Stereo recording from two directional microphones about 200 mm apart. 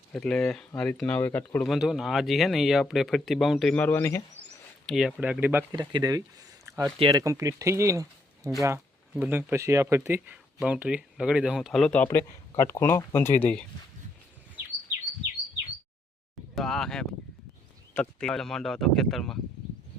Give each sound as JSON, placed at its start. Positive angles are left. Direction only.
{"t": 0.1, "sound": "speech", "side_deg": 5}
{"t": 1.7, "sound": "speech", "side_deg": 0}
{"t": 4.4, "sound": "a sound", "side_deg": -35}
{"t": 4.9, "sound": "speech", "side_deg": 0}
{"t": 5.7, "sound": "speech", "side_deg": -20}
{"t": 6.7, "sound": "a sound", "side_deg": -15}
{"t": 7.0, "sound": "speech", "side_deg": -20}
{"t": 12.0, "sound": "speech", "side_deg": 15}
{"t": 16.6, "sound": "speech", "side_deg": 0}